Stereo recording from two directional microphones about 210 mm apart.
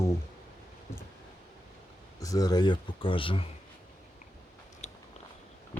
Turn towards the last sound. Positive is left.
turn(degrees=35)  # may be behind; listen again after turning